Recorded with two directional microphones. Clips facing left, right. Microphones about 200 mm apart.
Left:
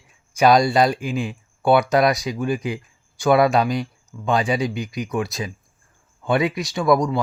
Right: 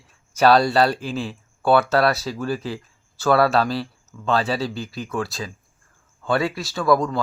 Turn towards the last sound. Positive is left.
turn(degrees=15)  # may be behind; listen again after turning